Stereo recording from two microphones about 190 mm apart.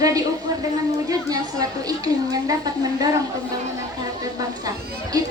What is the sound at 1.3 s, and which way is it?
Speech, 20° right (ahead or behind).